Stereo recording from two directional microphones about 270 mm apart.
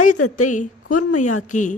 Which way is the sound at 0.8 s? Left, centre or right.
Left.